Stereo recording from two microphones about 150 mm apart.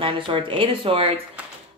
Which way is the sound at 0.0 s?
35° right (ahead or behind).